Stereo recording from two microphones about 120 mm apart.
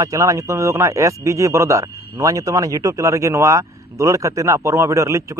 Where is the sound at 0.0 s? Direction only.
30° right (ahead or behind).